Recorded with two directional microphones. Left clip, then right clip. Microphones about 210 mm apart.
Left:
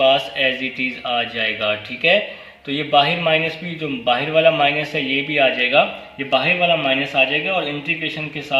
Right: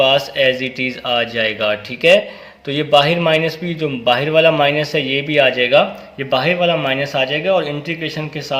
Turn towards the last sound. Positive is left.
turn(degrees=-45)  # may be behind; listen again after turning